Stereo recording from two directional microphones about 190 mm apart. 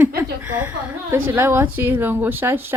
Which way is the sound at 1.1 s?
10° right (ahead or behind).